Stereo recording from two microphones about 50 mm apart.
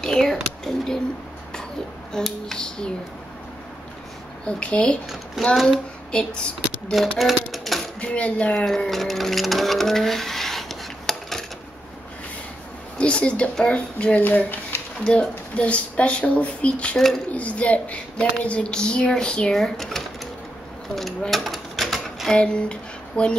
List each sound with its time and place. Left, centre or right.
0.0 s speech: centre
2.1 s speech: centre
4.5 s speech: left
5.4 s speech: centre
6.1 s speech: centre
6.9 s speech: centre
8.0 s speech: left
8.6 s sewing machine: centre
12.9 s a woman's voice: left
14.2 s speech: left
15.0 s speech: left
19.5 s speech: centre
21.3 s typewriter: centre
22.3 s a sound: left